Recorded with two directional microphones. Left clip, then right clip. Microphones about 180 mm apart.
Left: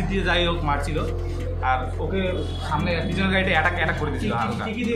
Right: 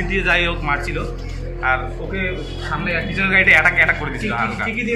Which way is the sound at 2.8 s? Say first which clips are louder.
Right 9 dB; 20° left (ahead or behind).